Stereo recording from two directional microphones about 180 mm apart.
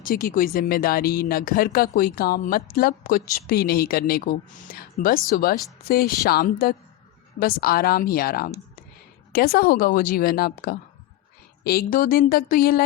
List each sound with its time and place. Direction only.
0.0 s speech: 50° left (ahead or behind)